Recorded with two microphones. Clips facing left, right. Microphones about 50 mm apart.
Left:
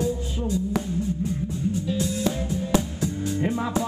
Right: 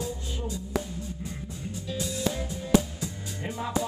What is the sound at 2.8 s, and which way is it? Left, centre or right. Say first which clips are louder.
Music: even; left.